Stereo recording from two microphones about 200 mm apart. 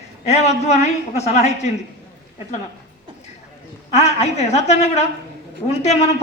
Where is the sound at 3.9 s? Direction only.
35° left (ahead or behind).